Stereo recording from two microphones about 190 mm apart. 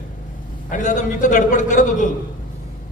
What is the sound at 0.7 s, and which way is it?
A man's voice, 40° left (ahead or behind).